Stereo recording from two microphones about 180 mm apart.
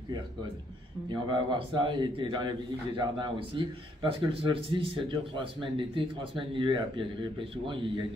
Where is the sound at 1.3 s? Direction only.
25° right (ahead or behind).